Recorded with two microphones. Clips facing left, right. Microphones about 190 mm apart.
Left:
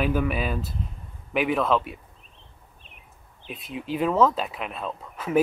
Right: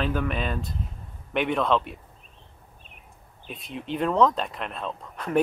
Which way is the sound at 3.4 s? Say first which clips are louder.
Left 2 dB; centre (ahead or behind).